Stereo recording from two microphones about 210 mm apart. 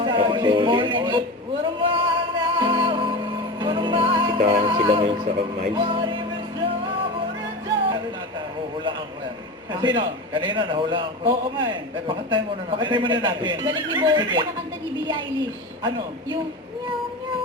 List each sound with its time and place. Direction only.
0.0 s music: 25° right (ahead or behind)
1.6 s a sound: 25° right (ahead or behind)
2.4 s music: 20° right (ahead or behind)
9.8 s a man's voice: 25° right (ahead or behind)